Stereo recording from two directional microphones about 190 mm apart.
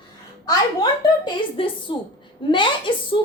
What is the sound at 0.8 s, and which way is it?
A woman's voice, 25° left (ahead or behind).